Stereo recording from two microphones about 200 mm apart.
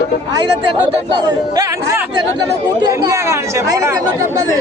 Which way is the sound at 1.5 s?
15° right (ahead or behind).